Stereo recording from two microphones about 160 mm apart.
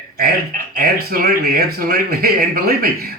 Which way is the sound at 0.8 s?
65° right (ahead or behind).